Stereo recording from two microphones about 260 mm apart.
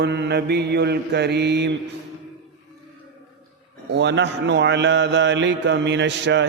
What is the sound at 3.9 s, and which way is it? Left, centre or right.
A man's voice, right.